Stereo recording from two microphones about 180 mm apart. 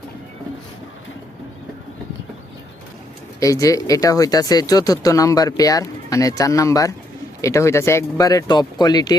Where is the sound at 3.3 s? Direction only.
20° left (ahead or behind).